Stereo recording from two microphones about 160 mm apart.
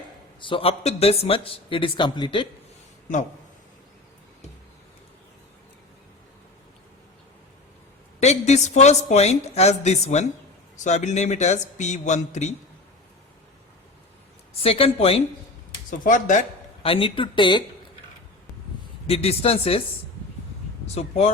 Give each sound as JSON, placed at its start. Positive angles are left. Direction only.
{"t": 0.3, "sound": "a man's voice", "side_deg": 30}
{"t": 8.2, "sound": "a woman's voice", "side_deg": 45}
{"t": 14.6, "sound": "a man's voice", "side_deg": 40}
{"t": 15.9, "sound": "a woman's voice", "side_deg": 55}
{"t": 16.8, "sound": "a man's voice", "side_deg": 35}
{"t": 19.0, "sound": "a man's voice", "side_deg": 40}
{"t": 20.8, "sound": "speech", "side_deg": 40}